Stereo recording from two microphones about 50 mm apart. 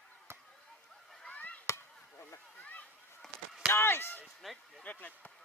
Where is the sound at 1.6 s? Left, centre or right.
Left.